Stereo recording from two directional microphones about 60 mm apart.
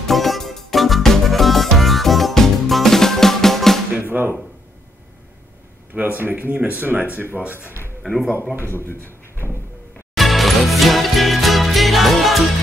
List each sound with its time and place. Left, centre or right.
0.0 s music: centre
4.0 s drum: right
5.9 s speech: right
8.7 s speech: left
10.1 s music: centre